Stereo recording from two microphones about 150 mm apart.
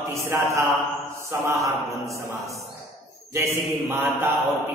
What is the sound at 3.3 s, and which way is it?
Speech, 20° right (ahead or behind).